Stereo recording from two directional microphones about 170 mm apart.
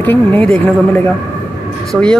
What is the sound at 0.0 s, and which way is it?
Speech, 10° left (ahead or behind).